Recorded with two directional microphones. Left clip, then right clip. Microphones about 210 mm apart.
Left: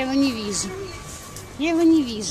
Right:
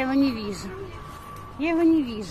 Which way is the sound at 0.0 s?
5° left (ahead or behind).